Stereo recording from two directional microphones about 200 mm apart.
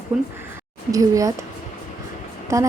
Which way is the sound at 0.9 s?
15° right (ahead or behind).